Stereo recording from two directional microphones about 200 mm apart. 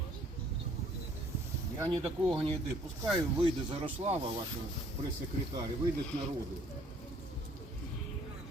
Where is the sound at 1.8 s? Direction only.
25° right (ahead or behind).